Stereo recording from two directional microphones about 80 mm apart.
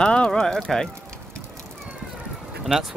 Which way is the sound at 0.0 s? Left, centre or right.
Centre.